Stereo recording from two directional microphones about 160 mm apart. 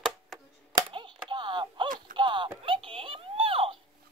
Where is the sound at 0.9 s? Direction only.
30° right (ahead or behind).